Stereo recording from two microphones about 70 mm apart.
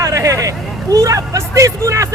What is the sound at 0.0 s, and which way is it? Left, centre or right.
Speech, right.